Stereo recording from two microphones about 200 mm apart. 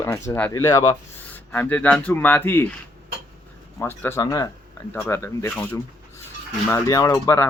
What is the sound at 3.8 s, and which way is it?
Cutlery, 10° left (ahead or behind).